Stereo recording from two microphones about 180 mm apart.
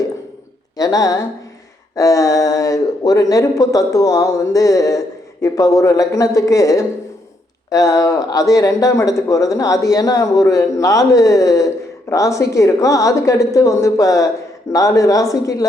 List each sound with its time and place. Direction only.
0.8 s speech: 20° left (ahead or behind)